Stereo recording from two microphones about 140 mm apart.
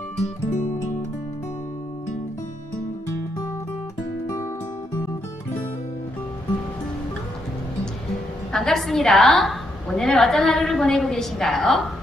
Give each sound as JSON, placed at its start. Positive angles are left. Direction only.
{"t": 0.2, "sound": "music", "side_deg": 55}
{"t": 8.5, "sound": "a woman's voice", "side_deg": 5}